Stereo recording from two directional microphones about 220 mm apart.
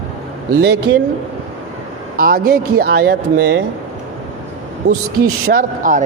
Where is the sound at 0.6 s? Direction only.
50° right (ahead or behind).